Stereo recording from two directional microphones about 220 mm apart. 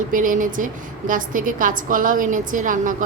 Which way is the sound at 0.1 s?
35° right (ahead or behind).